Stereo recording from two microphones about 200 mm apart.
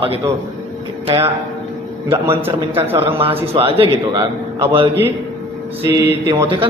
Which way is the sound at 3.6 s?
25° right (ahead or behind).